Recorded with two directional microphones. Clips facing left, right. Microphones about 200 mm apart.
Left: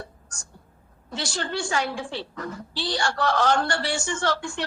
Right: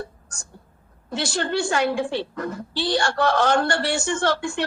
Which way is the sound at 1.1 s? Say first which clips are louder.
Right 5 dB; 55° right (ahead or behind).